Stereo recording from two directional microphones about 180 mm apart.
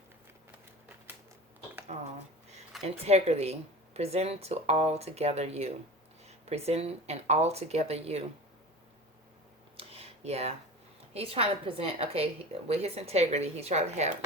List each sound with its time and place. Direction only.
1.9 s a woman's voice: 40° right (ahead or behind)
9.7 s a sound: 35° right (ahead or behind)
11.1 s a woman's voice: 35° right (ahead or behind)